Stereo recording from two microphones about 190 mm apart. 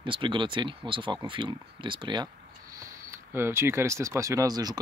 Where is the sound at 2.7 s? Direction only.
15° right (ahead or behind).